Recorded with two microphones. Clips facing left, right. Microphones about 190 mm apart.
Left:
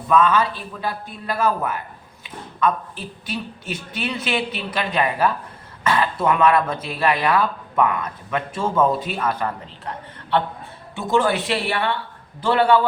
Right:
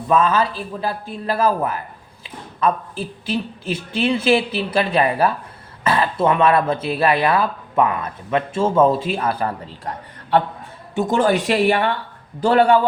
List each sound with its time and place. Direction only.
0.1 s a man's voice: 30° right (ahead or behind)
2.2 s a sound: 30° right (ahead or behind)
3.2 s a woman's voice: 30° right (ahead or behind)
10.9 s a man's voice: 45° right (ahead or behind)